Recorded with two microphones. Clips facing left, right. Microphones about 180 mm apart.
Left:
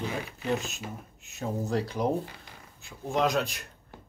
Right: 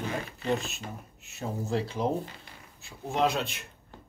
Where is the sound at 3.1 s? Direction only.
30° right (ahead or behind).